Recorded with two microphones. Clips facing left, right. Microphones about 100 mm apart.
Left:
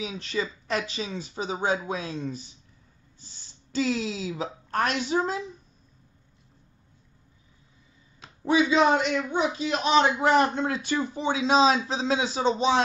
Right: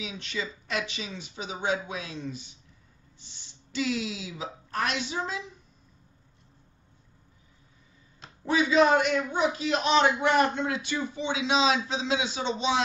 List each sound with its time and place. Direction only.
0.0 s a man's voice: 40° left (ahead or behind)
8.5 s a man's voice: 25° left (ahead or behind); by 12.8 s 40° left (ahead or behind)